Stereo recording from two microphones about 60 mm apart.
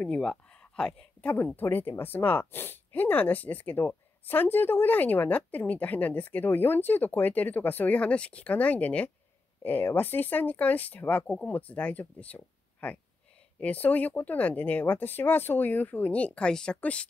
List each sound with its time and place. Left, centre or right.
0.0 s speech: centre
1.6 s speech: left
8.0 s speech: centre